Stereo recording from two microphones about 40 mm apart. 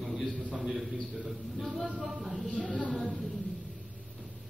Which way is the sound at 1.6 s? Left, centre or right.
Centre.